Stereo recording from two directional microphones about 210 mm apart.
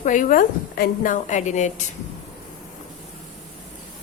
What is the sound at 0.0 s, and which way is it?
A woman's voice, 40° left (ahead or behind).